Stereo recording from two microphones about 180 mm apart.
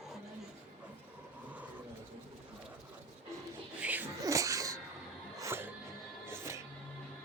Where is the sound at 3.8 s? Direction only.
10° right (ahead or behind).